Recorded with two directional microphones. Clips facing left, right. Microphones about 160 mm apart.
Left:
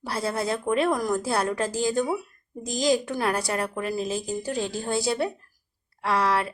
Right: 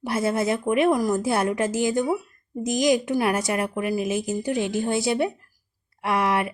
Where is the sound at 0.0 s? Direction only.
20° right (ahead or behind).